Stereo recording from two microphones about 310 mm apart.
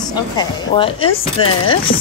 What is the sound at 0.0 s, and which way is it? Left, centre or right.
Speech, centre.